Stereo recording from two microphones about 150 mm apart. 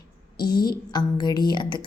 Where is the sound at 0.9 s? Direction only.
30° left (ahead or behind).